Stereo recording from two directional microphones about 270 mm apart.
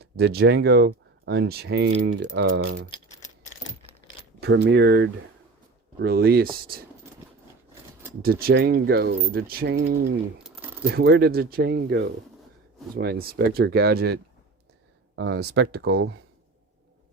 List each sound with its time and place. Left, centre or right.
0.0 s speech: right
4.4 s speech: right
8.2 s speech: right
10.4 s shuffling cards: centre
10.9 s speech: right